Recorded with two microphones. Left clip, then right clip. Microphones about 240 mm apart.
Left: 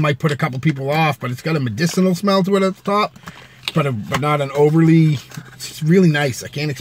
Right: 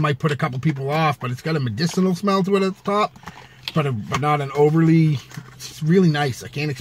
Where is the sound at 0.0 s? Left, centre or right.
Centre.